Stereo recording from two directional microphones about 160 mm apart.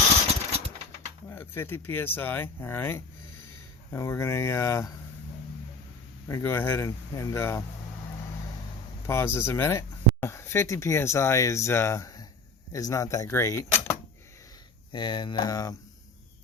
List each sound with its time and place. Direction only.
1.3 s speech: 15° left (ahead or behind)
6.2 s speech: 15° left (ahead or behind)
9.0 s speech: 15° left (ahead or behind)
14.9 s speech: 30° left (ahead or behind)